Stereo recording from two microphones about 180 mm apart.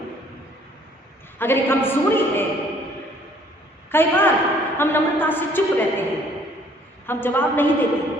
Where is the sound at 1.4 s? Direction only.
10° left (ahead or behind).